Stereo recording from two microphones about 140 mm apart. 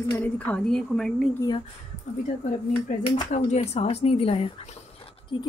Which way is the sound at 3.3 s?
55° left (ahead or behind).